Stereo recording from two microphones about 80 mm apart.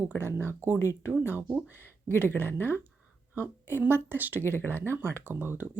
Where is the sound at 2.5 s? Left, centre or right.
Left.